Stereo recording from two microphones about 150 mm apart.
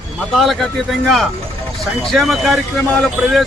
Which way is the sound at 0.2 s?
Centre (ahead or behind).